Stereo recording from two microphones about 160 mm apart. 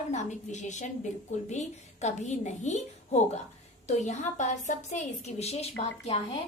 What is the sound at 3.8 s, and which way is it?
A woman's voice, 45° left (ahead or behind).